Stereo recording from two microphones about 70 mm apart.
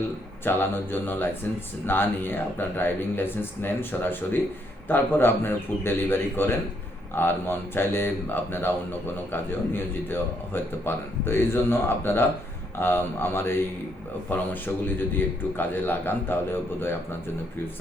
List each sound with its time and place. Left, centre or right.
0.4 s a man's voice: left